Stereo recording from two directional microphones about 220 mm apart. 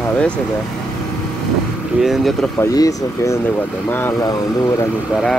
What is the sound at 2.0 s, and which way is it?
Speech, centre (ahead or behind).